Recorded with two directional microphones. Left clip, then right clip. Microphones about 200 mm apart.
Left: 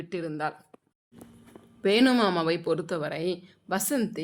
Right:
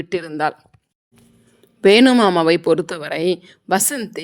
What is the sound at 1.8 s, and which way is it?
A woman's voice, 40° right (ahead or behind).